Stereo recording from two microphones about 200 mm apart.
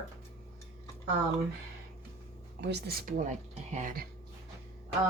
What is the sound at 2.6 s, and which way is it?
Speech, 55° right (ahead or behind).